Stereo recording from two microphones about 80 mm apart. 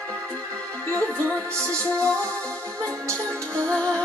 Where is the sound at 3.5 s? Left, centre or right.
Centre.